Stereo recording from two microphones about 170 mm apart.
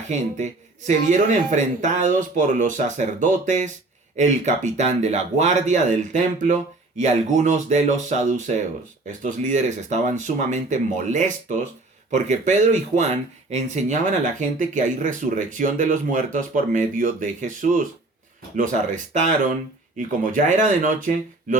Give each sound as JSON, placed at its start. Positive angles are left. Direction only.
{"t": 0.1, "sound": "speech", "side_deg": -45}
{"t": 20.0, "sound": "speech", "side_deg": -50}